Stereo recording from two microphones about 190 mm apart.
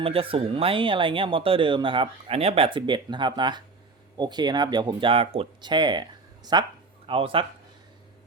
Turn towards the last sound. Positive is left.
turn(degrees=-30)  # may be behind; listen again after turning